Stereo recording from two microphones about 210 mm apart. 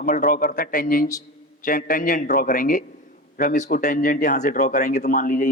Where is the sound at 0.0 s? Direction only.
40° left (ahead or behind).